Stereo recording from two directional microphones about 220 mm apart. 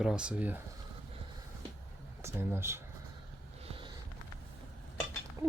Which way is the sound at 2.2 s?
10° right (ahead or behind).